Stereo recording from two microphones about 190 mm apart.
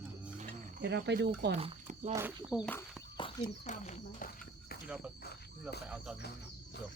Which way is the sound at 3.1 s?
25° left (ahead or behind).